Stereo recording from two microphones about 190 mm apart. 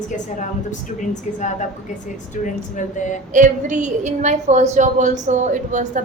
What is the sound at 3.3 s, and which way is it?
A woman's voice, 40° right (ahead or behind).